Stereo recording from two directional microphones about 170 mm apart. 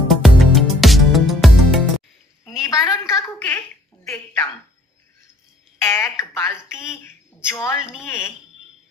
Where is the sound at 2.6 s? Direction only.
20° left (ahead or behind).